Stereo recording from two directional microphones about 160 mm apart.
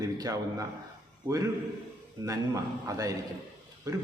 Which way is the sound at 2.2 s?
20° right (ahead or behind).